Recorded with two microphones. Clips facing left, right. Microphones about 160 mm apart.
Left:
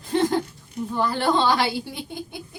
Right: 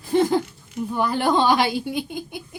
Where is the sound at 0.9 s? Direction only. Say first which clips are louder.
Right 1 dB; 15° right (ahead or behind).